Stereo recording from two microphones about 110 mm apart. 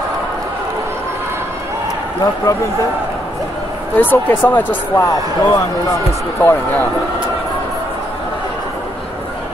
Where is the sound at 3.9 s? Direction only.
15° left (ahead or behind).